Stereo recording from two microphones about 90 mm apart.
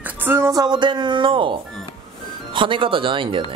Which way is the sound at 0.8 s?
60° right (ahead or behind).